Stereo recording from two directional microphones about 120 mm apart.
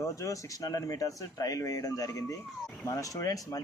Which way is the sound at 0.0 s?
25° left (ahead or behind).